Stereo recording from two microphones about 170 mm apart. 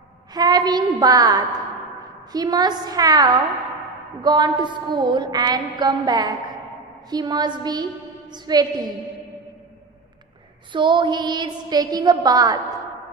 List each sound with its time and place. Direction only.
0.3 s a woman's voice: 25° right (ahead or behind)
10.7 s a woman's voice: 30° right (ahead or behind)